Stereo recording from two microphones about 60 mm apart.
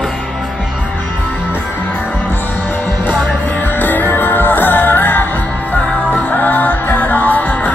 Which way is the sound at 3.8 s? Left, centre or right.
Left.